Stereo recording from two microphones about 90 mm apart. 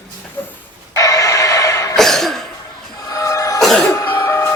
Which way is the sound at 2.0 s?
5° left (ahead or behind).